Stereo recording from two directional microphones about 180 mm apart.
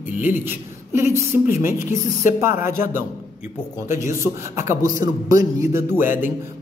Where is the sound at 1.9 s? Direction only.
45° left (ahead or behind).